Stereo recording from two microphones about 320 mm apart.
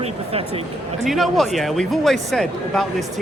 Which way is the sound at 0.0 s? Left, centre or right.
Centre.